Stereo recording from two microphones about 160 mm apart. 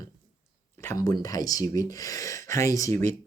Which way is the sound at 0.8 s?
20° left (ahead or behind).